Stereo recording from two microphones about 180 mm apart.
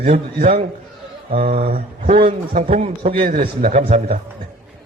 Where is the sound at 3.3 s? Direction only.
45° right (ahead or behind).